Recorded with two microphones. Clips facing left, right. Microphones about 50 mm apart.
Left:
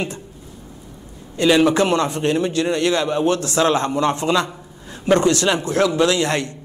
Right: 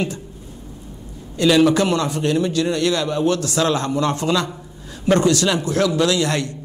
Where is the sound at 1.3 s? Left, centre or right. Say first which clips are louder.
Even; left.